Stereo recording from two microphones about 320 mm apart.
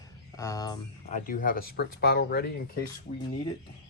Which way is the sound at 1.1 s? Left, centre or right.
Left.